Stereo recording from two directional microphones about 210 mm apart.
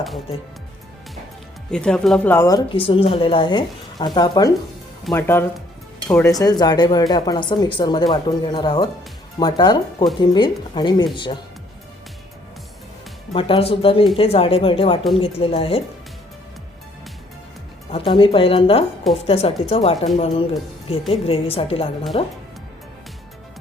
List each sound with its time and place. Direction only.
1.7 s speech: 5° left (ahead or behind); by 11.3 s 25° left (ahead or behind)
13.3 s speech: 25° left (ahead or behind)
17.9 s speech: 25° left (ahead or behind)